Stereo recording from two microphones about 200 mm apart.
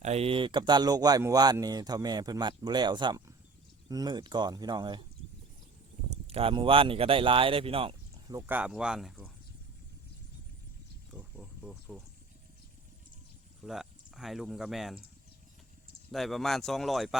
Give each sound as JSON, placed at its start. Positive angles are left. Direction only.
{"t": 0.0, "sound": "speech", "side_deg": -30}
{"t": 6.2, "sound": "speech", "side_deg": -30}
{"t": 8.4, "sound": "speech", "side_deg": -10}
{"t": 11.1, "sound": "a sound", "side_deg": -5}
{"t": 13.7, "sound": "speech", "side_deg": 0}
{"t": 16.1, "sound": "speech", "side_deg": 0}